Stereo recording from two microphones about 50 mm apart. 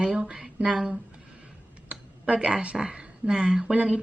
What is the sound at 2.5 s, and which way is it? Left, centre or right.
A woman's voice, centre.